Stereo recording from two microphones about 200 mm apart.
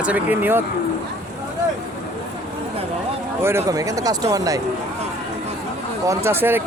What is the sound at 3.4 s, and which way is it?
Speech, 15° right (ahead or behind).